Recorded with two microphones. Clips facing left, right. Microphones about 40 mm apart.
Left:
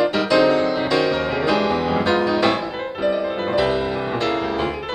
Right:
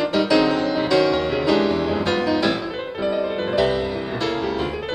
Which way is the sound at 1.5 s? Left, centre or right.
Left.